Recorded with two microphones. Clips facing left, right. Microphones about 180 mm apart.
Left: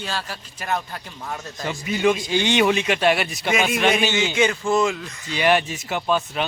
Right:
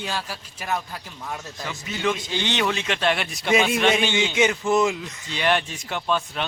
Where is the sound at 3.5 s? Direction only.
30° right (ahead or behind).